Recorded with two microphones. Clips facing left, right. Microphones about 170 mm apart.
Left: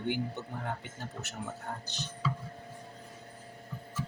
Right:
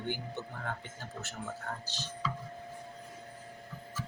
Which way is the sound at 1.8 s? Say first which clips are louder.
Left 1 dB; 20° left (ahead or behind).